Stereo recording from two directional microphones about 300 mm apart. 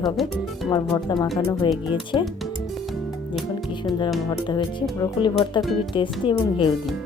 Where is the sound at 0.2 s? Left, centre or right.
Centre.